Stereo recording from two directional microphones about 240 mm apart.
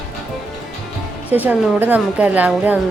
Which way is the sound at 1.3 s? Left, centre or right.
Centre.